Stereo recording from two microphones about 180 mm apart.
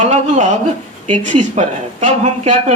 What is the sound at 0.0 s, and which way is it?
Speech, 40° right (ahead or behind).